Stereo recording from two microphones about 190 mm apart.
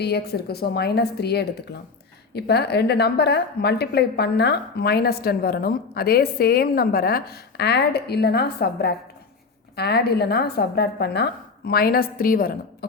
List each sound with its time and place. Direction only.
0.0 s a woman's voice: 60° left (ahead or behind)